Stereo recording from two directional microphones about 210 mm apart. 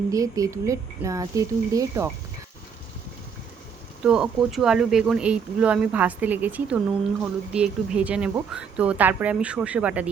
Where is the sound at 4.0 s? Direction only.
5° right (ahead or behind).